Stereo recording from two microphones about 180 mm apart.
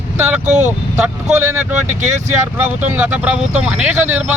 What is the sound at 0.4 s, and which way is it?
Speech, 40° right (ahead or behind).